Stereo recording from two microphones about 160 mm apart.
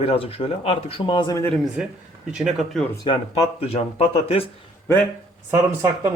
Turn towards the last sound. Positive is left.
turn(degrees=-15)  # may be behind; listen again after turning